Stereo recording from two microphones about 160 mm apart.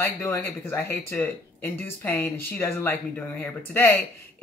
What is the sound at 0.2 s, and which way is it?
Speech, 15° left (ahead or behind).